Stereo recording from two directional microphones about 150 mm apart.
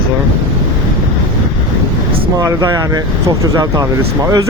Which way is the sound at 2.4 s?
20° right (ahead or behind).